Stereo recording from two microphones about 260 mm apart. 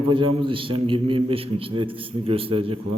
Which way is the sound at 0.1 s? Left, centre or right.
Centre.